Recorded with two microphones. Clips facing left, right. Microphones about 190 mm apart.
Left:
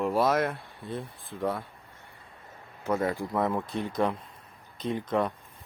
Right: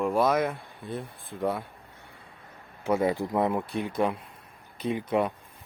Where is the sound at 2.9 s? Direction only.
15° right (ahead or behind).